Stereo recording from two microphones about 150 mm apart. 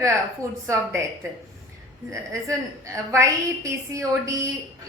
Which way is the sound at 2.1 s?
20° right (ahead or behind).